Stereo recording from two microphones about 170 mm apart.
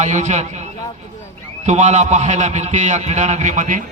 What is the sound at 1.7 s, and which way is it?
A man's voice, 40° right (ahead or behind).